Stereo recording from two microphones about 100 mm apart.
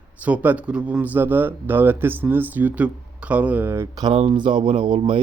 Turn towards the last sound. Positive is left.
turn(degrees=-60)  # may be behind; listen again after turning